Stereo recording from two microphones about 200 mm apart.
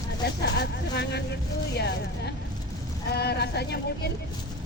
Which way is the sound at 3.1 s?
55° left (ahead or behind).